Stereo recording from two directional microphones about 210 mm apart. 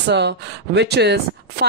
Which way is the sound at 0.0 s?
55° right (ahead or behind).